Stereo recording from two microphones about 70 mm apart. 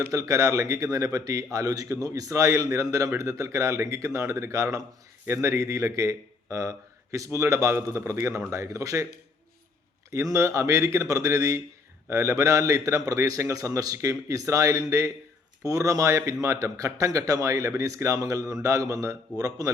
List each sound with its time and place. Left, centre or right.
0.1 s a man's voice: right
5.2 s a man's voice: right
10.1 s a man's voice: right